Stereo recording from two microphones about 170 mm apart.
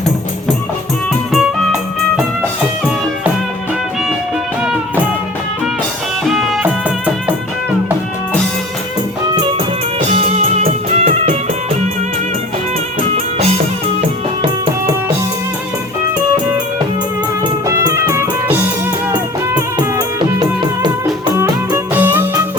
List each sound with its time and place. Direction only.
1.3 s music: centre (ahead or behind)
6.2 s music: centre (ahead or behind)
9.3 s music: 30° right (ahead or behind)
10.0 s music: 40° right (ahead or behind)
17.7 s music: 15° right (ahead or behind)